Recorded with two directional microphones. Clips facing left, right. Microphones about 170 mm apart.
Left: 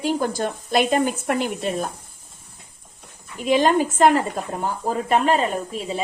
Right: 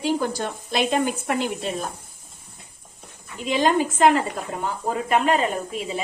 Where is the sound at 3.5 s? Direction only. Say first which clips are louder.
Left 3 dB; 45° left (ahead or behind).